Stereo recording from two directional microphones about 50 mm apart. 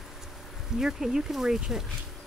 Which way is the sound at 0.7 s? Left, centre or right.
Centre.